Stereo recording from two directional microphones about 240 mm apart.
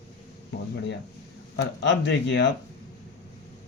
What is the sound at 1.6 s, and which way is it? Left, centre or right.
Speech, left.